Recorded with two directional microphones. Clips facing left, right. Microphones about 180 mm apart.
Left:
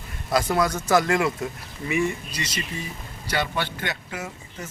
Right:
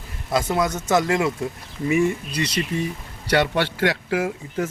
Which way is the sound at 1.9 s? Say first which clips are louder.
Right 5 dB; 50° right (ahead or behind).